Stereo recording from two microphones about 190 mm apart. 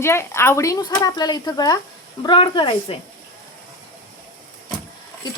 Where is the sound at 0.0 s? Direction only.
15° left (ahead or behind).